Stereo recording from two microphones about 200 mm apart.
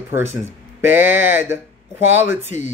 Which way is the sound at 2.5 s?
35° left (ahead or behind).